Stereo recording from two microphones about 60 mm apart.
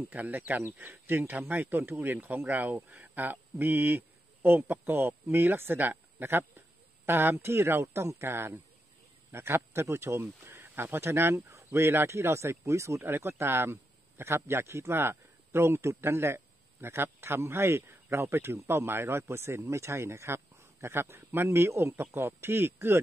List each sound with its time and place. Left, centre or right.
0.1 s speech: right
13.1 s a man's voice: right